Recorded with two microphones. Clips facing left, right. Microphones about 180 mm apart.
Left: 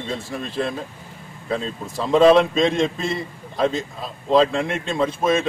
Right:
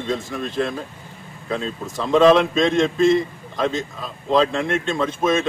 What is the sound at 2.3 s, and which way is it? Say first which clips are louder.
Speech: even; centre (ahead or behind).